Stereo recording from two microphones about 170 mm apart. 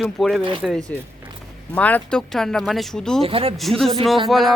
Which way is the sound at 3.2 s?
35° right (ahead or behind).